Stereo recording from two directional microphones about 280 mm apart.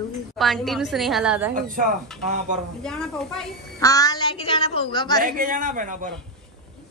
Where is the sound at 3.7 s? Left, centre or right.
Centre.